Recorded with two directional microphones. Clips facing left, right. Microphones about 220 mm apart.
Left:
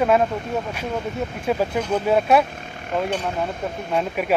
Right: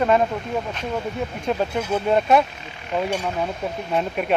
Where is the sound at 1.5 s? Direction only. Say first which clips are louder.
Left 2 dB; 5° left (ahead or behind).